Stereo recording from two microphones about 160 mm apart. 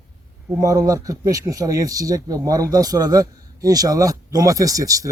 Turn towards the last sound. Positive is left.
turn(degrees=-20)  # may be behind; listen again after turning